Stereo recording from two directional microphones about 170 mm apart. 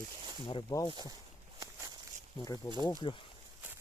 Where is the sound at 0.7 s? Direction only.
20° left (ahead or behind).